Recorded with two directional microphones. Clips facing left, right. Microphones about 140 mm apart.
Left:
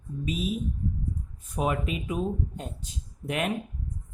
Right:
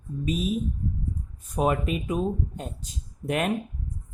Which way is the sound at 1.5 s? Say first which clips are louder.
Right 4 dB; 45° right (ahead or behind).